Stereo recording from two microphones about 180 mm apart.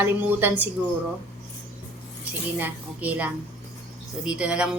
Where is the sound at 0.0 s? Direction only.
10° right (ahead or behind).